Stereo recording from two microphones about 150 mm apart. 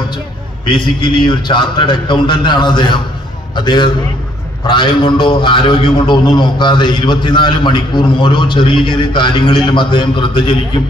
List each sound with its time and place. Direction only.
0.7 s a man's voice: 35° left (ahead or behind)